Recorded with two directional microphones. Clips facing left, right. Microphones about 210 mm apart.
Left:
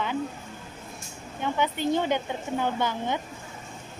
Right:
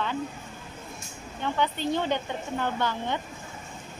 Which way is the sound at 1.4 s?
10° left (ahead or behind).